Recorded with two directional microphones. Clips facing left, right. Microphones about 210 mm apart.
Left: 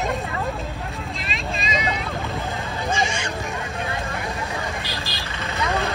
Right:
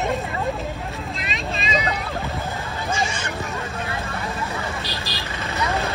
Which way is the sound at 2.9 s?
15° left (ahead or behind).